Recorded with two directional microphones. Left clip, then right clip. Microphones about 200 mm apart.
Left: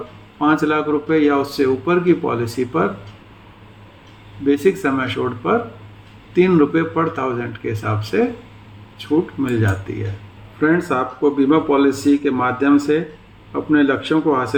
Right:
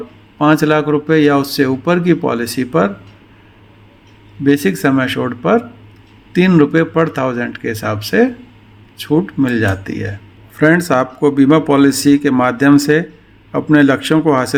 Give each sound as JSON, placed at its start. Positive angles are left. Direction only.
{"t": 0.3, "sound": "a man's voice", "side_deg": -60}
{"t": 4.4, "sound": "a man's voice", "side_deg": -60}